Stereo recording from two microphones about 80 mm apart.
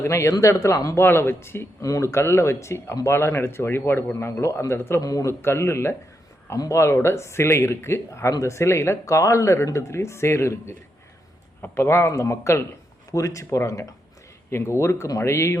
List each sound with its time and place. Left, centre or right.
0.0 s a man's voice: left
0.9 s a man's voice: left
1.8 s a man's voice: left
4.9 s a man's voice: left
5.3 s a man's voice: left